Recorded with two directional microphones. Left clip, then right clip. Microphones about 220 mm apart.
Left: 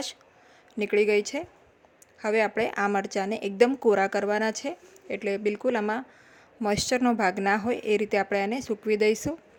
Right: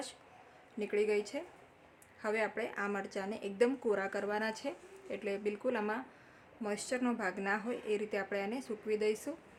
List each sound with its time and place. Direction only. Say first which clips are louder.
0.8 s speech: left 10 dB; 35° left (ahead or behind)